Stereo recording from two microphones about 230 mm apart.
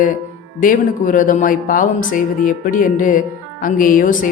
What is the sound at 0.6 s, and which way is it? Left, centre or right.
Speech, left.